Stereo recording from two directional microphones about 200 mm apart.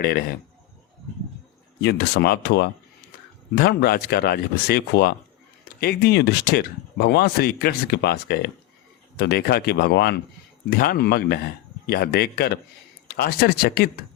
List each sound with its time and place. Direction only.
0.0 s speech: 50° left (ahead or behind)
1.8 s speech: 55° left (ahead or behind)